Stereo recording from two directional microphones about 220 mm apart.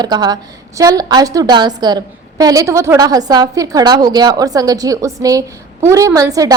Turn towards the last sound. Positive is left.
turn(degrees=-15)  # may be behind; listen again after turning